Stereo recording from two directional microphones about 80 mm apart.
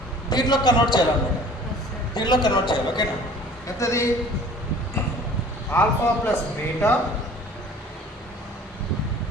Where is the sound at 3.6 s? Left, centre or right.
Left.